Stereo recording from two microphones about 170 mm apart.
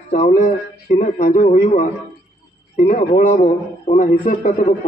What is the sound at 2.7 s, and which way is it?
A man's voice, 45° left (ahead or behind).